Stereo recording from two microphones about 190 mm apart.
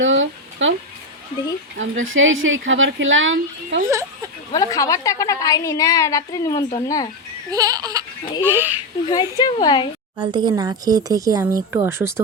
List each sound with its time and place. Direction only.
0.0 s a sound: 80° right
1.8 s speech: 90° right
4.5 s a woman's voice: 20° left (ahead or behind)
7.5 s speech: 20° right (ahead or behind)
9.0 s a woman's voice: 20° left (ahead or behind)
10.2 s speech: 25° right (ahead or behind)